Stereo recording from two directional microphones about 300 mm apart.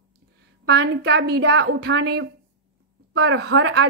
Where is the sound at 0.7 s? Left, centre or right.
Right.